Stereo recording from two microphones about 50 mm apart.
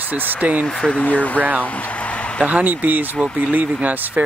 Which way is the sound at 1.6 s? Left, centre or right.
Left.